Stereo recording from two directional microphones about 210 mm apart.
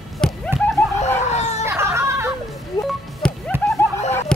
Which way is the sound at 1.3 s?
35° left (ahead or behind).